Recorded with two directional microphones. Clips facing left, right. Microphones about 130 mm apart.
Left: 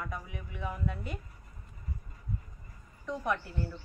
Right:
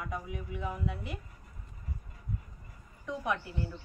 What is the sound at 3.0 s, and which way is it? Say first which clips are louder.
Speech: left 1 dB; 10° right (ahead or behind).